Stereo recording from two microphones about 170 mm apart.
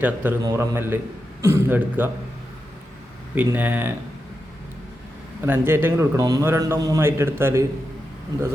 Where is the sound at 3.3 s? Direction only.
10° right (ahead or behind).